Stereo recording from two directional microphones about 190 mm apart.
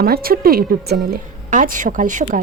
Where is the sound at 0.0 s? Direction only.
50° right (ahead or behind).